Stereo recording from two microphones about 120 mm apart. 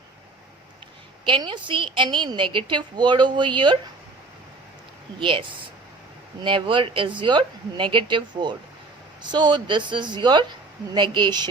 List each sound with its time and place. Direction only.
1.2 s a woman's voice: 40° right (ahead or behind)
5.2 s a woman's voice: 45° right (ahead or behind)